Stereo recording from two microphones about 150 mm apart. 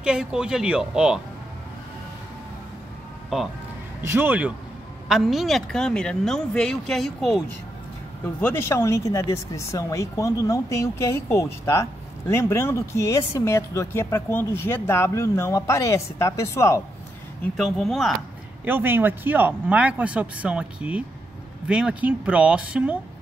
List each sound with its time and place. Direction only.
0.0 s a woman's voice: 5° right (ahead or behind)
4.0 s a woman's voice: 15° right (ahead or behind); by 7.4 s centre (ahead or behind)
8.4 s speech: 15° left (ahead or behind)
17.6 s a woman's voice: centre (ahead or behind)
18.7 s speech: 15° right (ahead or behind)